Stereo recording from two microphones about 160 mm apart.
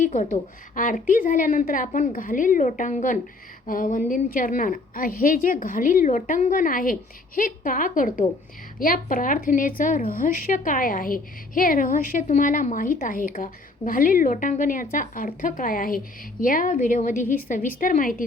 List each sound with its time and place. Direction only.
0.0 s a woman's voice: 50° left (ahead or behind)